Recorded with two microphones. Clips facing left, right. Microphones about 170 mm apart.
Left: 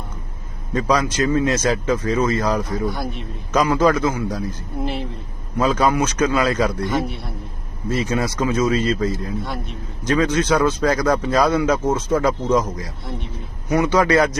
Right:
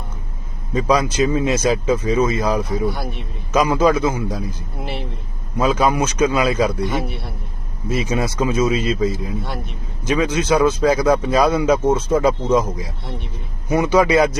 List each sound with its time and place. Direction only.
0.7 s speech: 10° right (ahead or behind)
5.5 s speech: 10° right (ahead or behind)
13.7 s a man's voice: 25° right (ahead or behind)
13.9 s speech: 10° right (ahead or behind)